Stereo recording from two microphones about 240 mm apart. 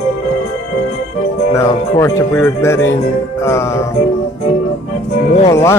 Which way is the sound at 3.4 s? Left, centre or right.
Centre.